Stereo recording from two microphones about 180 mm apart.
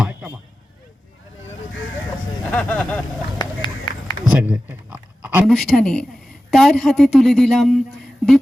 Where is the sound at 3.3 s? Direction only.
25° left (ahead or behind).